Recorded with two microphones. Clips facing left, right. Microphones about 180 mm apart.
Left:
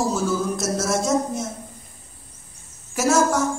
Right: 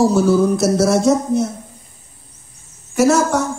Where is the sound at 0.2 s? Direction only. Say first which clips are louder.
Right 10 dB; 65° right (ahead or behind).